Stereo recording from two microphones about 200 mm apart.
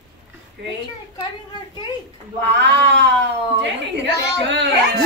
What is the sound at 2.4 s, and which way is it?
A woman's voice, 60° right (ahead or behind).